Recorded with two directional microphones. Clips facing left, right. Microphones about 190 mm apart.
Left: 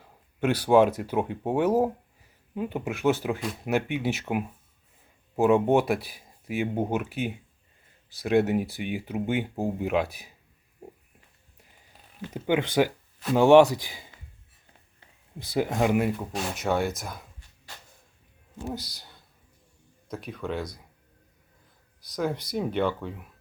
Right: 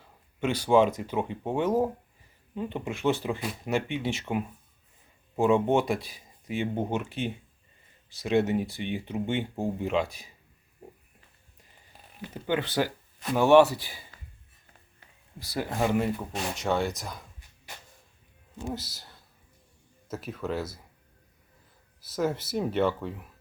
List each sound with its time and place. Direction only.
0.3 s speech: 10° left (ahead or behind)
8.4 s speech: centre (ahead or behind)
9.4 s speech: 15° left (ahead or behind)
10.0 s speech: 60° left (ahead or behind)
12.3 s speech: 15° left (ahead or behind)
15.4 s speech: 20° left (ahead or behind)
16.1 s speech: centre (ahead or behind)
18.5 s speech: 5° left (ahead or behind)
22.1 s speech: 5° right (ahead or behind)